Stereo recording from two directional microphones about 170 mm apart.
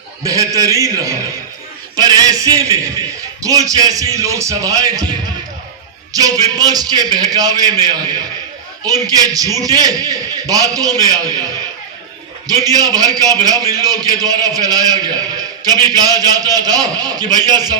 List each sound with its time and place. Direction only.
0.3 s a man's voice: 20° right (ahead or behind)
6.1 s a man's voice: 20° right (ahead or behind)
12.5 s a man's voice: 20° right (ahead or behind)